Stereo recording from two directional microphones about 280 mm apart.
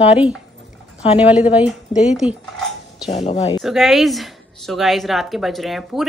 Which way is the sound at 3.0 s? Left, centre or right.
Left.